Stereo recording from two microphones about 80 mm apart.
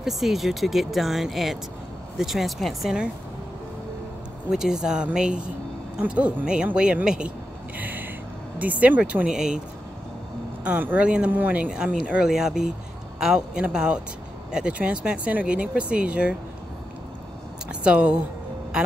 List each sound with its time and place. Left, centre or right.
0.0 s speech: centre
4.5 s speech: centre
10.6 s speech: right
17.8 s speech: centre